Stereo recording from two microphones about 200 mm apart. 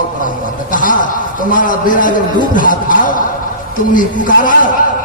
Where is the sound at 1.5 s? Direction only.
40° left (ahead or behind).